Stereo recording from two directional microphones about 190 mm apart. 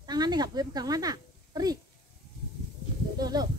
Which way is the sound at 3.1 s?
20° right (ahead or behind).